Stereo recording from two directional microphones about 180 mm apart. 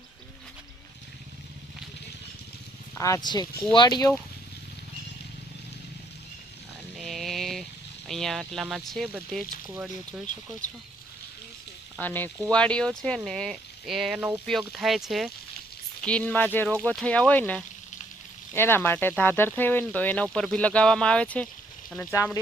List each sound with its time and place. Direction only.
2.9 s speech: 15° left (ahead or behind)
7.0 s vehicle: centre (ahead or behind)
9.6 s speech: 15° right (ahead or behind)
10.1 s speech: centre (ahead or behind)
11.9 s speech: 10° left (ahead or behind)